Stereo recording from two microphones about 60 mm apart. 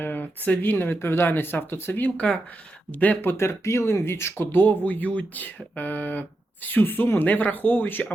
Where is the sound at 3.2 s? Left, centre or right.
Left.